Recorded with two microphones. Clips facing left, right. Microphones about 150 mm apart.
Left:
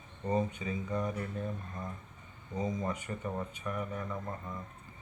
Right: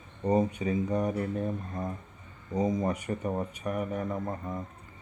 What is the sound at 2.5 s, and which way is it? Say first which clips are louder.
Speech: right 7 dB; 35° right (ahead or behind).